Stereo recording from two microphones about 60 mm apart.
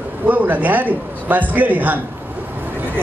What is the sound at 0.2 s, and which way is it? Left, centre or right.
A man's voice, right.